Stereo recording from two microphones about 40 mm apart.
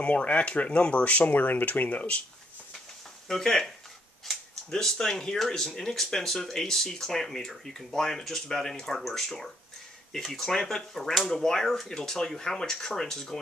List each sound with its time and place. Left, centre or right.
0.0 s speech: left
3.3 s speech: centre
4.7 s speech: centre